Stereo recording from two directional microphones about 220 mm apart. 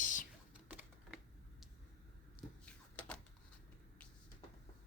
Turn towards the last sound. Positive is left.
turn(degrees=5)  # may be behind; listen again after turning